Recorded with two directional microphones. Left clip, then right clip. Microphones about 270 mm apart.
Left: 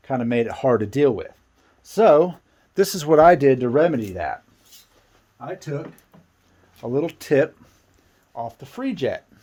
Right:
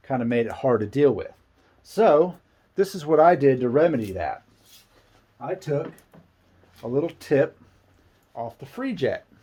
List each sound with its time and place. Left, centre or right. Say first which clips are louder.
0.0 s speech: left 2 dB; left
6.8 s speech: left 2 dB; left
8.4 s speech: left 2 dB; left